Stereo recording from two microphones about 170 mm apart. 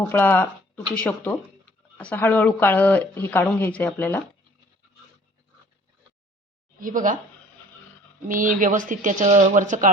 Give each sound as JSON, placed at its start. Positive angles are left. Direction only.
{"t": 0.0, "sound": "speech", "side_deg": 10}
{"t": 6.7, "sound": "speech", "side_deg": -50}
{"t": 8.3, "sound": "speech", "side_deg": -50}